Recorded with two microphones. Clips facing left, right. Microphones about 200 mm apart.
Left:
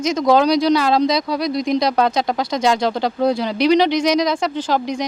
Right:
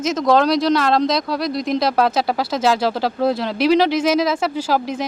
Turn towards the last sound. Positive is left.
turn(degrees=-5)  # may be behind; listen again after turning